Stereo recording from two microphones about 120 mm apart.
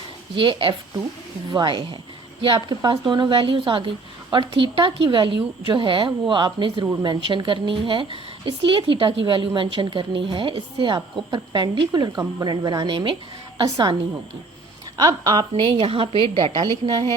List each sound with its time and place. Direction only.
0.3 s a woman's voice: 40° right (ahead or behind)
14.9 s speech: 30° right (ahead or behind)